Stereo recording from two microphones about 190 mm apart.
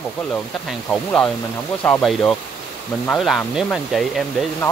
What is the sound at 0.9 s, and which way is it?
Speech, 5° left (ahead or behind).